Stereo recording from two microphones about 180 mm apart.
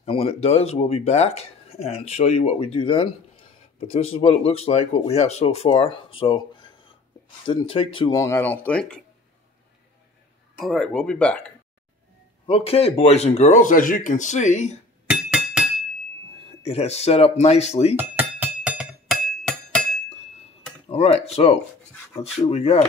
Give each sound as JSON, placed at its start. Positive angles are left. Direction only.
{"t": 0.0, "sound": "speech", "side_deg": 30}
{"t": 8.2, "sound": "speech", "side_deg": 15}
{"t": 10.6, "sound": "speech", "side_deg": 0}
{"t": 12.4, "sound": "speech", "side_deg": 35}
{"t": 15.0, "sound": "chink", "side_deg": -5}
{"t": 16.6, "sound": "speech", "side_deg": 35}
{"t": 17.9, "sound": "music", "side_deg": -10}
{"t": 20.9, "sound": "speech", "side_deg": 35}